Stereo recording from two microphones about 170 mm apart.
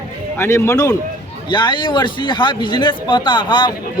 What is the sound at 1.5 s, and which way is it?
Speech, 25° left (ahead or behind).